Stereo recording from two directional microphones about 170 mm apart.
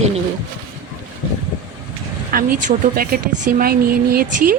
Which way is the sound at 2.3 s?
55° right (ahead or behind).